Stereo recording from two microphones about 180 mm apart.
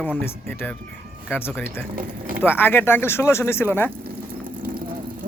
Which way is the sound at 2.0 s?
50° right (ahead or behind).